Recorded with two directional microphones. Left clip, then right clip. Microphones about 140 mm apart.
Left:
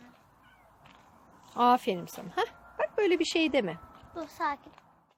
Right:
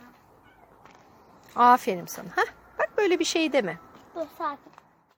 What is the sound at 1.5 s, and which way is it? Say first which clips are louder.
A woman's voice: right 6 dB; 20° left (ahead or behind).